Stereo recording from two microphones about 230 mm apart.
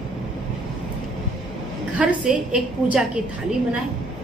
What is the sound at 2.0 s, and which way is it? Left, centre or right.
A woman's voice, centre.